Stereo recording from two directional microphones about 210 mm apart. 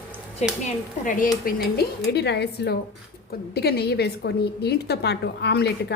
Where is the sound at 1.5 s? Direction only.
50° left (ahead or behind).